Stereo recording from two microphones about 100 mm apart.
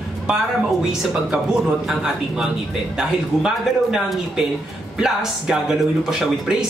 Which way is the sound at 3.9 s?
5° right (ahead or behind).